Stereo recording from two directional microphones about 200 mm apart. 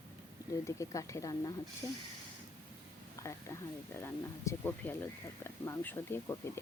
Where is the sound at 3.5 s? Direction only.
15° left (ahead or behind).